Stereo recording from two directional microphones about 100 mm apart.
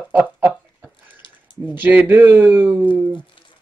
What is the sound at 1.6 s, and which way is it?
Speech, 15° right (ahead or behind).